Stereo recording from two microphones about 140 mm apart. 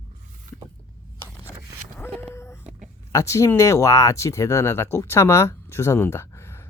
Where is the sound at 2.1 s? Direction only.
20° left (ahead or behind).